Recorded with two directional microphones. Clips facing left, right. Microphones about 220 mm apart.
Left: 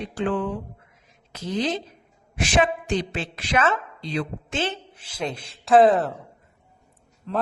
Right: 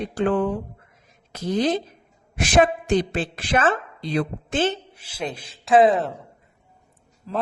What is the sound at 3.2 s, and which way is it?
Speech, 50° right (ahead or behind).